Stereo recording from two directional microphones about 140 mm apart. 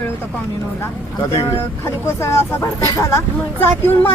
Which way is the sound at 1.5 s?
20° left (ahead or behind).